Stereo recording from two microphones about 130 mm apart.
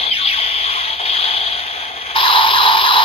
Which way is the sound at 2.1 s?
40° left (ahead or behind).